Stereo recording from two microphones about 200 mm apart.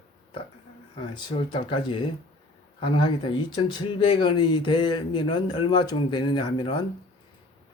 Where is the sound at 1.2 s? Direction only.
25° left (ahead or behind).